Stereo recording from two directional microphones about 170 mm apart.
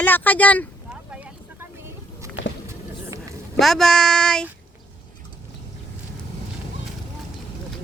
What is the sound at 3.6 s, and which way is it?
Speech, centre (ahead or behind).